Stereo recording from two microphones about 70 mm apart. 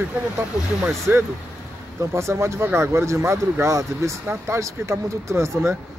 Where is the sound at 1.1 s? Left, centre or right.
Right.